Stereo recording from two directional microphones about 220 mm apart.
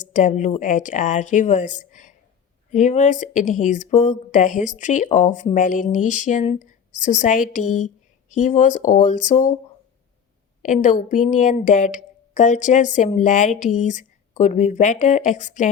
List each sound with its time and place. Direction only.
0.0 s speech: 35° left (ahead or behind)
10.6 s speech: 35° left (ahead or behind)